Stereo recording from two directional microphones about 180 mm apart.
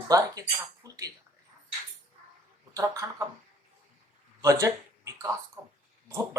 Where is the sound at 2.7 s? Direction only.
20° right (ahead or behind).